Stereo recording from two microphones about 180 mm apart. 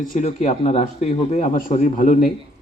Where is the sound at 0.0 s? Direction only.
50° left (ahead or behind).